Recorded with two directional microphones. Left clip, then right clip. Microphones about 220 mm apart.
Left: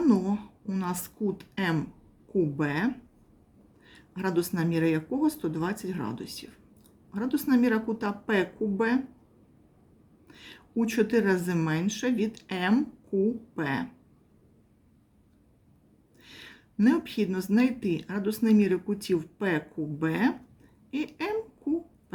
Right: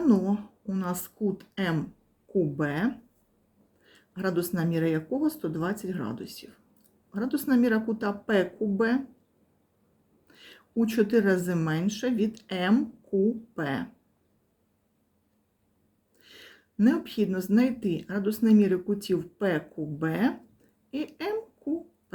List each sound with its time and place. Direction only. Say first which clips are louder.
0.0 s a woman's voice: even; centre (ahead or behind)
10.2 s speech: left 3 dB; centre (ahead or behind)
16.2 s speech: left 2 dB; centre (ahead or behind)